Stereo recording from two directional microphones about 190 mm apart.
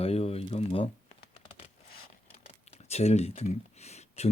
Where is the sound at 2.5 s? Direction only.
35° left (ahead or behind).